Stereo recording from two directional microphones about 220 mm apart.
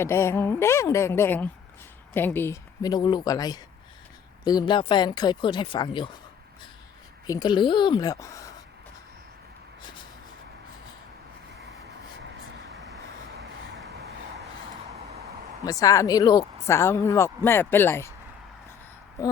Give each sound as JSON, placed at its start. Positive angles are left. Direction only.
{"t": 0.0, "sound": "speech", "side_deg": 10}
{"t": 7.3, "sound": "speech", "side_deg": 20}
{"t": 15.6, "sound": "speech", "side_deg": 15}